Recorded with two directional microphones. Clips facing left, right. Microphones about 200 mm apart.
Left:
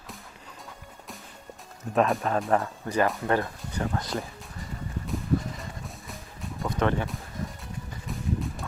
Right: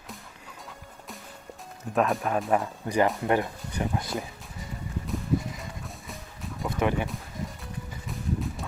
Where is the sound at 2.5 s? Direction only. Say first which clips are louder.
Right 2 dB; 15° right (ahead or behind).